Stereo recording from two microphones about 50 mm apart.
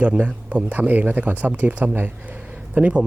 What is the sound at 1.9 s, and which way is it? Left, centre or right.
Speech, right.